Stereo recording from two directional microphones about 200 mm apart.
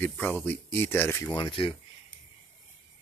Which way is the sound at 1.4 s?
25° left (ahead or behind).